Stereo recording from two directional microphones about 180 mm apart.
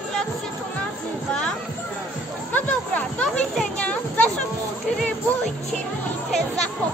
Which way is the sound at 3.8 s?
5° left (ahead or behind).